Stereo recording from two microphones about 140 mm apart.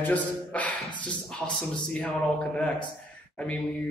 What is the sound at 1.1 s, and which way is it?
A man's voice, 5° left (ahead or behind).